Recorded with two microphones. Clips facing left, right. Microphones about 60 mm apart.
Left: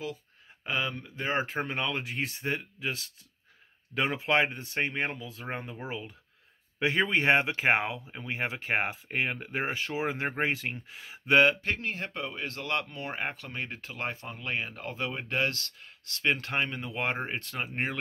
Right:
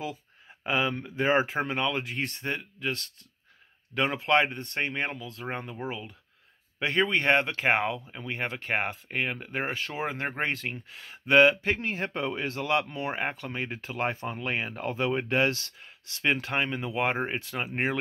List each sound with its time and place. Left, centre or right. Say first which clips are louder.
0.7 s speech: right 4 dB; centre
1.5 s speech: right 3 dB; centre
11.6 s speech: right 3 dB; right
16.3 s speech: right 2 dB; centre